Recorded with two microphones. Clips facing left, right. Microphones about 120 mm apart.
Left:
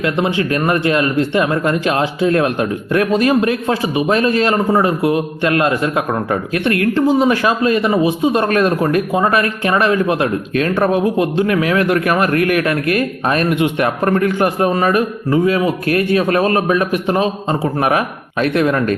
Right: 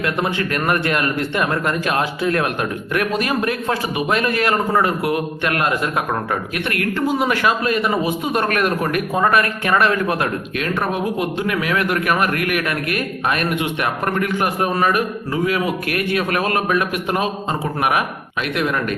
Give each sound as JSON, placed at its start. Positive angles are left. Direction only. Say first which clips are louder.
{"t": 0.0, "sound": "speech", "louder": "left 4 dB", "side_deg": 25}